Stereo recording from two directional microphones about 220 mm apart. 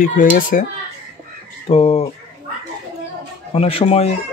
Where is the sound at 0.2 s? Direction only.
35° left (ahead or behind).